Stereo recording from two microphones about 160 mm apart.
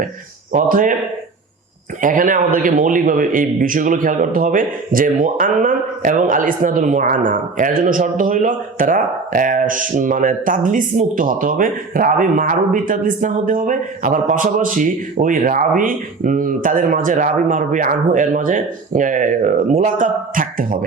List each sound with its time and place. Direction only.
0.5 s speech: 55° right (ahead or behind)
2.0 s speech: 55° right (ahead or behind)